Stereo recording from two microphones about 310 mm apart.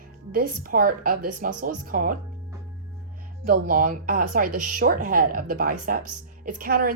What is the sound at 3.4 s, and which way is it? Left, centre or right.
Speech, right.